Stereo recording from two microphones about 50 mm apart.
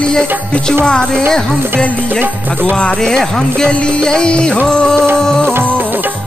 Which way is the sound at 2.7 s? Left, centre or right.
Centre.